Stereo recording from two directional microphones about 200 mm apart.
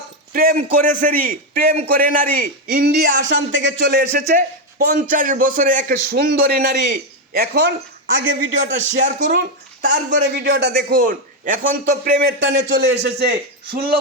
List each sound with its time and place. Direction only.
0.3 s a man's voice: 45° right (ahead or behind)
3.2 s speech: 65° right (ahead or behind)
4.3 s a man's voice: 45° right (ahead or behind)
8.7 s speech: 40° right (ahead or behind)
9.8 s a man's voice: 60° right (ahead or behind)